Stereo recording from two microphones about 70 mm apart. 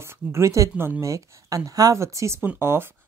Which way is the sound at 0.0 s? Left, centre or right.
Right.